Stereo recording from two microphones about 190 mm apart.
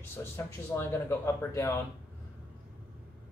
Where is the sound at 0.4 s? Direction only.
15° left (ahead or behind).